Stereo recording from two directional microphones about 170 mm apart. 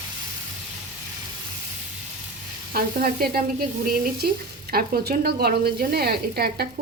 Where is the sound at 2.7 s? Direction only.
60° right (ahead or behind).